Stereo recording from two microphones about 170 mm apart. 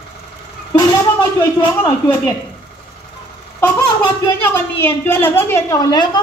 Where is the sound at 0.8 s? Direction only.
20° left (ahead or behind).